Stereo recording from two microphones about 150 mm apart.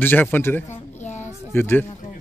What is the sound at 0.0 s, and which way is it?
Speech, 15° left (ahead or behind).